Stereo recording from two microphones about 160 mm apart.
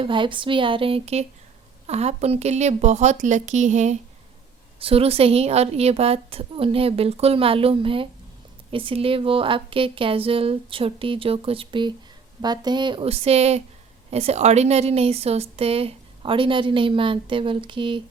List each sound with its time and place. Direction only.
0.0 s a woman's voice: 30° right (ahead or behind); by 3.9 s 45° right (ahead or behind)
4.8 s a woman's voice: 35° right (ahead or behind)